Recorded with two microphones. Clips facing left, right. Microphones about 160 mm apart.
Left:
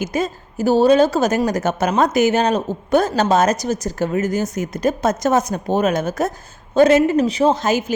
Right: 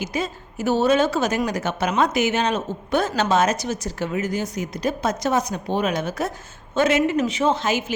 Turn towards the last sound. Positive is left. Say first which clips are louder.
# left 4 dB
turn(degrees=40)  # may be behind; listen again after turning